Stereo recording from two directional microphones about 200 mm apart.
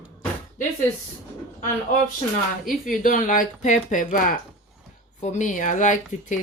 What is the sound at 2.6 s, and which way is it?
Speech, 40° left (ahead or behind).